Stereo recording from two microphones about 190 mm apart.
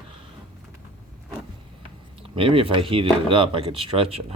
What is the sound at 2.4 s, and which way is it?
Speech, 30° right (ahead or behind).